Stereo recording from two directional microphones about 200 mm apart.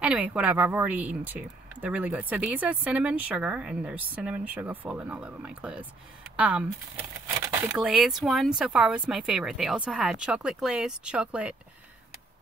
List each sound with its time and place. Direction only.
0.0 s a woman's voice: 5° right (ahead or behind)